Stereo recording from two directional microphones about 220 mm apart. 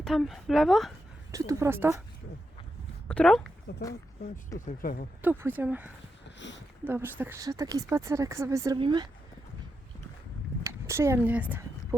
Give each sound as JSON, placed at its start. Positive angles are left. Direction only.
{"t": 0.0, "sound": "a woman's voice", "side_deg": 0}
{"t": 1.3, "sound": "speech", "side_deg": -15}
{"t": 3.1, "sound": "a woman's voice", "side_deg": 5}
{"t": 3.7, "sound": "speech", "side_deg": 50}
{"t": 4.5, "sound": "speech", "side_deg": 35}
{"t": 5.2, "sound": "speech", "side_deg": -10}
{"t": 6.2, "sound": "a sound", "side_deg": 55}
{"t": 6.8, "sound": "speech", "side_deg": -10}
{"t": 10.6, "sound": "a sound", "side_deg": -10}
{"t": 11.3, "sound": "speech", "side_deg": -5}